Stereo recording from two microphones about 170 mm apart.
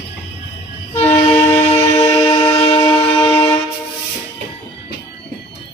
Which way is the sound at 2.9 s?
35° left (ahead or behind).